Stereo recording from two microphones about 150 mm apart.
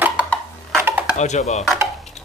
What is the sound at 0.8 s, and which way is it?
Dishes, 15° right (ahead or behind).